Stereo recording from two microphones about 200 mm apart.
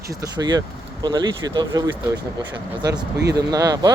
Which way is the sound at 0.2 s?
20° right (ahead or behind).